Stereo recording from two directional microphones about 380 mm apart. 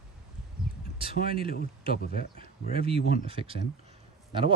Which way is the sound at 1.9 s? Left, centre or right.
Left.